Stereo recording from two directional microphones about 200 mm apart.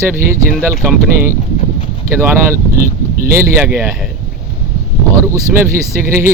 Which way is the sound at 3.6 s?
5° right (ahead or behind).